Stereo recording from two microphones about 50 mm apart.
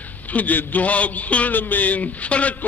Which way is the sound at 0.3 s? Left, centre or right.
Left.